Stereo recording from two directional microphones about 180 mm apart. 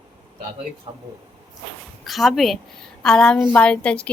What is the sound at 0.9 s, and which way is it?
Speech, 25° right (ahead or behind).